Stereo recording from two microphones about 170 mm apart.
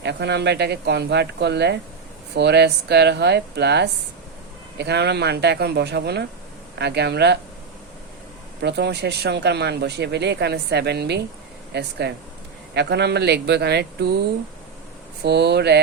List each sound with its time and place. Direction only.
0.0 s speech: 85° right
8.6 s speech: 85° right
15.2 s speech: 80° right